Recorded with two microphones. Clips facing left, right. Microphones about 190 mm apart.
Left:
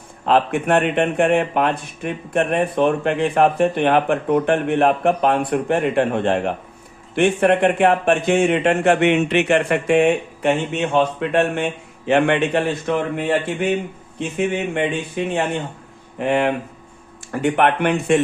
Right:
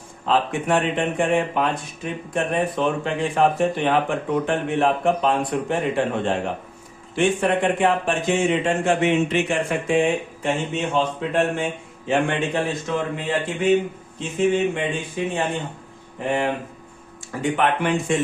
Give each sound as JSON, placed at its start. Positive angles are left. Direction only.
{"t": 0.3, "sound": "speech", "side_deg": 60}